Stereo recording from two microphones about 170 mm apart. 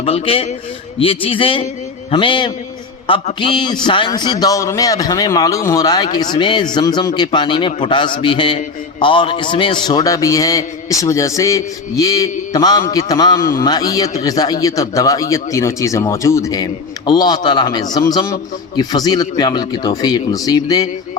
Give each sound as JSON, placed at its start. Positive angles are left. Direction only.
{"t": 0.0, "sound": "a man's voice", "side_deg": 35}